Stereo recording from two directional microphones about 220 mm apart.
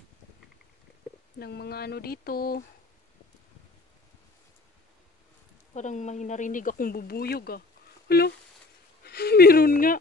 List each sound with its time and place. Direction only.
1.4 s mantra: 45° left (ahead or behind)
5.8 s speech: 35° left (ahead or behind)
8.1 s mantra: 45° left (ahead or behind)
9.0 s speech: 45° left (ahead or behind)